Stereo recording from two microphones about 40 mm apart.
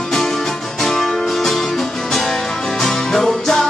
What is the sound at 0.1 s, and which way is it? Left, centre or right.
Music, centre.